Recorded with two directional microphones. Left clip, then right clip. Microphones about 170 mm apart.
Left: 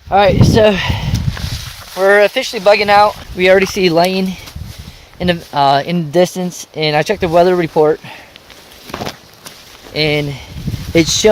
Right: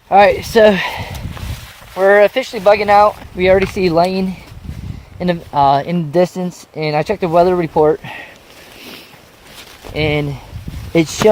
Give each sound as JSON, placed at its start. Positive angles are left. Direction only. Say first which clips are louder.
{"t": 0.1, "sound": "speech", "louder": "right 1 dB", "side_deg": -40}
{"t": 2.0, "sound": "speech", "louder": "even", "side_deg": -25}
{"t": 3.3, "sound": "speech", "louder": "left 5 dB", "side_deg": -5}
{"t": 9.9, "sound": "speech", "louder": "left 2 dB", "side_deg": -15}
{"t": 10.9, "sound": "speech", "louder": "left 2 dB", "side_deg": -5}